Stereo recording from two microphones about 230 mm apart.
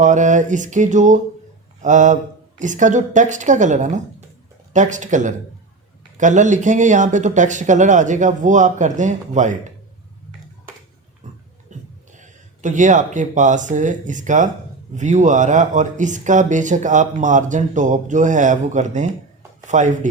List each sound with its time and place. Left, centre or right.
0.0 s speech: right
11.7 s a sound: right
12.1 s speech: right